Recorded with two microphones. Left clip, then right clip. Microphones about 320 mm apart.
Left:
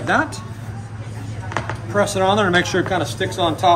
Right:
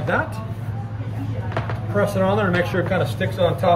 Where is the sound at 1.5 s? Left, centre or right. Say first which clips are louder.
Left 3 dB; centre.